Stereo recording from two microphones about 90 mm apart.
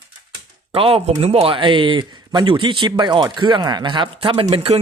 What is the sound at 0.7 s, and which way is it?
Speech, 90° right.